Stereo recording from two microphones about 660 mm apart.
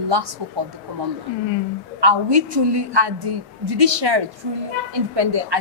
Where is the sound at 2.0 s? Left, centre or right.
Right.